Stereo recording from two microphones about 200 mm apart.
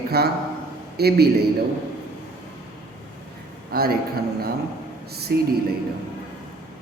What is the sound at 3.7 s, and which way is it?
Speech, 50° right (ahead or behind).